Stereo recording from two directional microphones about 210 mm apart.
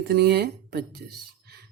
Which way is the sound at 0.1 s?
50° right (ahead or behind).